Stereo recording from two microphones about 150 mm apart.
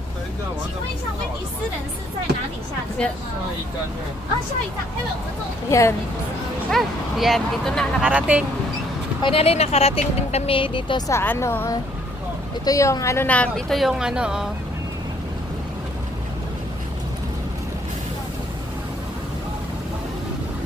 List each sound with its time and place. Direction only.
3.0 s speech: 5° left (ahead or behind)
5.7 s a woman's voice: 20° left (ahead or behind)
6.7 s a woman's voice: centre (ahead or behind)
8.0 s speech: 10° right (ahead or behind)
9.2 s speech: 40° left (ahead or behind)
11.1 s a woman's voice: 15° left (ahead or behind); by 14.5 s 5° right (ahead or behind)